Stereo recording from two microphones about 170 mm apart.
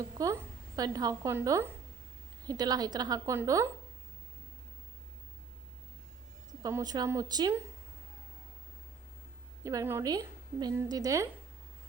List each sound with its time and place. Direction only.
0.2 s a woman's voice: 20° right (ahead or behind)
6.6 s a woman's voice: 20° right (ahead or behind)
9.6 s a woman's voice: 15° right (ahead or behind)